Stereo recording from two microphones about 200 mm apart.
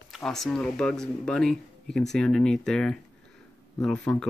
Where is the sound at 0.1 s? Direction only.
Centre (ahead or behind).